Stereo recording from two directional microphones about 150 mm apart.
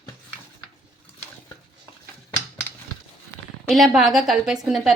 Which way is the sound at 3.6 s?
Centre (ahead or behind).